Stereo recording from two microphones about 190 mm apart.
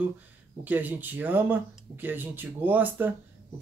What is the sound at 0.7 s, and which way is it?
Speech, 10° right (ahead or behind).